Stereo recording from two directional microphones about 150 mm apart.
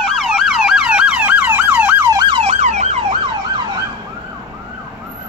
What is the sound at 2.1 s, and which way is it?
Emergency vehicle, 30° right (ahead or behind).